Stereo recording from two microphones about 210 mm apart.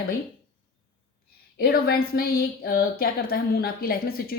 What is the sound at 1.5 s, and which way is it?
A woman's voice, 45° left (ahead or behind).